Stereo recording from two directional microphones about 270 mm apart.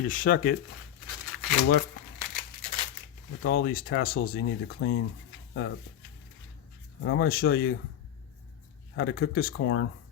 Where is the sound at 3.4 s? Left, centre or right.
Left.